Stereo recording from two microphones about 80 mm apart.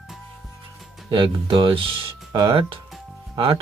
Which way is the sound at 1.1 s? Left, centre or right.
Right.